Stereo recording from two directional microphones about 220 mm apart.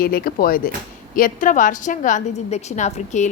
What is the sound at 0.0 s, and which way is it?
A woman's voice, 45° left (ahead or behind).